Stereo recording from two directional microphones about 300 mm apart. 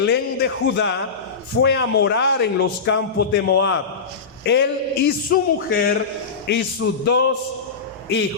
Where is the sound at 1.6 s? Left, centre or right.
Left.